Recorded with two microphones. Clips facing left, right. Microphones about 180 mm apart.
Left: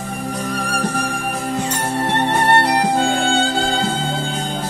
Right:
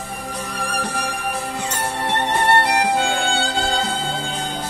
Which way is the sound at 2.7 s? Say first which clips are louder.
Left 2 dB; 40° left (ahead or behind).